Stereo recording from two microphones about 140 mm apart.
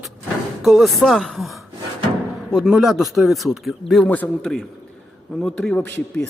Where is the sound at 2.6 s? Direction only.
5° right (ahead or behind).